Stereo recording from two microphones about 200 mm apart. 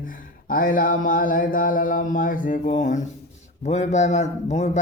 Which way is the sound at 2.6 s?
35° left (ahead or behind).